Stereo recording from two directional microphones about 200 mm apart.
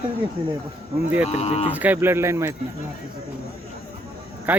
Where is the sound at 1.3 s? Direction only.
30° left (ahead or behind).